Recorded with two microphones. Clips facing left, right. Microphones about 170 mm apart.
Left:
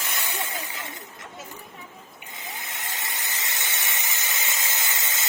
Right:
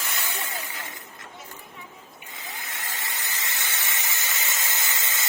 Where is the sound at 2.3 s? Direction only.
20° left (ahead or behind).